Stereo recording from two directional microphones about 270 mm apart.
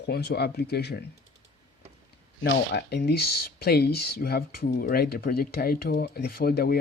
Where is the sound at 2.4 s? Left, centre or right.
Left.